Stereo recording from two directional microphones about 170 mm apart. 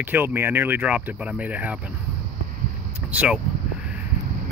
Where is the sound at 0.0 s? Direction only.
10° right (ahead or behind).